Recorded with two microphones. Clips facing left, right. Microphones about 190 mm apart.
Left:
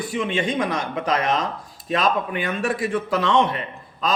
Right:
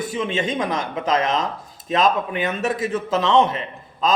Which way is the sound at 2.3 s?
20° right (ahead or behind).